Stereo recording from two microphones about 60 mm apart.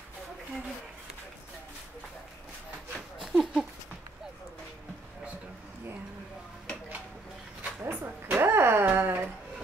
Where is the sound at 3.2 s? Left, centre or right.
Centre.